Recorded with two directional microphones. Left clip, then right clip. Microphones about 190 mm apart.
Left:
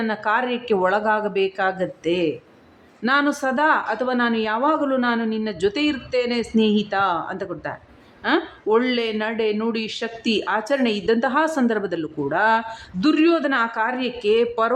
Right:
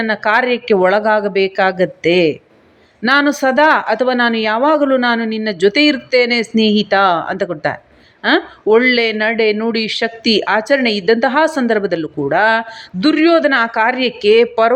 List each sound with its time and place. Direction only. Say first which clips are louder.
0.1 s a woman's voice: right 9 dB; 20° right (ahead or behind)